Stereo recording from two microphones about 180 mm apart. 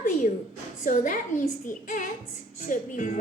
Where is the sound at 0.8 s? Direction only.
45° left (ahead or behind).